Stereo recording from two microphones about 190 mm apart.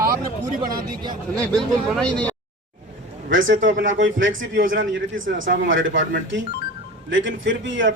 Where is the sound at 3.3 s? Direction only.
90° right.